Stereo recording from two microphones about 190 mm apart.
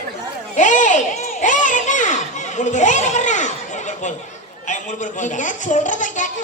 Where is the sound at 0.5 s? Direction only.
40° left (ahead or behind).